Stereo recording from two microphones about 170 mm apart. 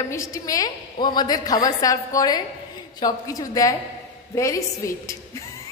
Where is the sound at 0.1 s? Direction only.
20° left (ahead or behind).